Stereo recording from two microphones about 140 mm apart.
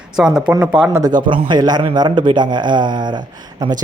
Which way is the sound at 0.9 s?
30° right (ahead or behind).